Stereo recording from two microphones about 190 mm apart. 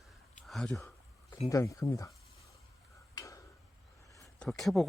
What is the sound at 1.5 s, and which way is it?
Speech, 15° left (ahead or behind).